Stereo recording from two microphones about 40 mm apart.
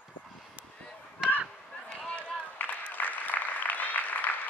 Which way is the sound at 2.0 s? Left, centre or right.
Left.